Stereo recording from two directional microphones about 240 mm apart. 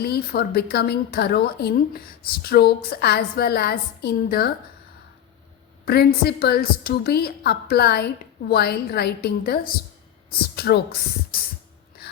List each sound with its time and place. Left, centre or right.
0.0 s a woman's voice: left
5.8 s a woman's voice: left